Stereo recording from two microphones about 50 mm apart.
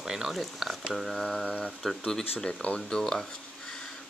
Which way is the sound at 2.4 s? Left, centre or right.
Left.